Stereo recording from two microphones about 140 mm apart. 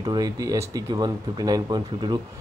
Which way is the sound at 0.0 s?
25° right (ahead or behind).